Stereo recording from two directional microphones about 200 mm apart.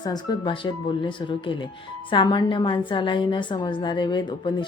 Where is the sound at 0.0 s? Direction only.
20° left (ahead or behind).